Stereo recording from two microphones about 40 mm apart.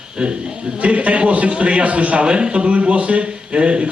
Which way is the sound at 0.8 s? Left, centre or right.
Right.